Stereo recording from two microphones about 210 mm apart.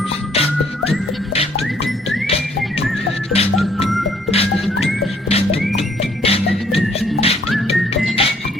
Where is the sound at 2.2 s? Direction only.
30° left (ahead or behind).